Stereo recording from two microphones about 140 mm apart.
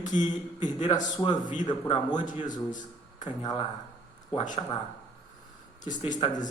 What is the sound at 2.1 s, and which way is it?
Speech, 65° left (ahead or behind).